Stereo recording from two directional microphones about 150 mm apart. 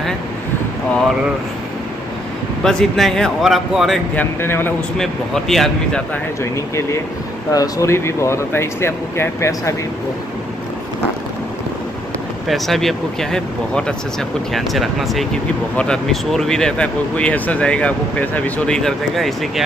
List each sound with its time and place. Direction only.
2.6 s speech: 5° left (ahead or behind)
4.1 s speech: 15° left (ahead or behind)
4.9 s speech: 5° left (ahead or behind)
6.5 s speech: 20° left (ahead or behind)
12.4 s speech: centre (ahead or behind)